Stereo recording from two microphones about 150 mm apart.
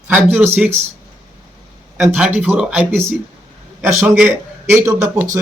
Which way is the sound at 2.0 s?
10° right (ahead or behind).